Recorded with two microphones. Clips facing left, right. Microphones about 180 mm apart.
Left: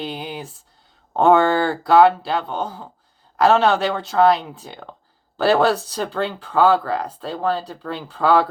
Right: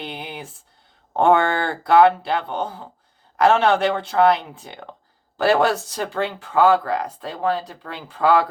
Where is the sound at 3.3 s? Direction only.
20° right (ahead or behind).